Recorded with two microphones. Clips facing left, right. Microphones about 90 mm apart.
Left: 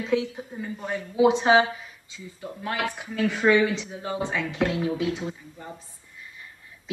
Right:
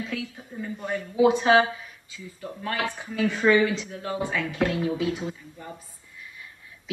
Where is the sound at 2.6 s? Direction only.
10° left (ahead or behind).